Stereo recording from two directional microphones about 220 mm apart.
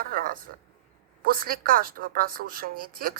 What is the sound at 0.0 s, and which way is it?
A woman's voice, 40° right (ahead or behind).